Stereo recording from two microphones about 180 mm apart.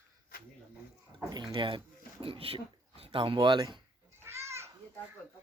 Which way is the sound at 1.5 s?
30° right (ahead or behind).